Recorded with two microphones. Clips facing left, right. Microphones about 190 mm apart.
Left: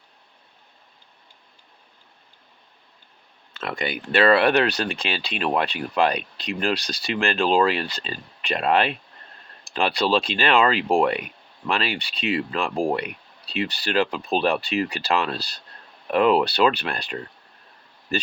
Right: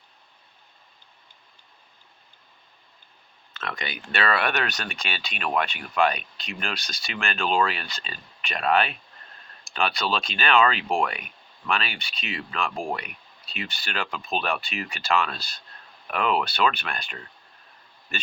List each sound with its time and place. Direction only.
3.8 s speech: 30° left (ahead or behind)